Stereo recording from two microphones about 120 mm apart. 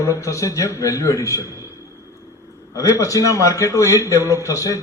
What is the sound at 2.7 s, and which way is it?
A man's voice, 25° left (ahead or behind).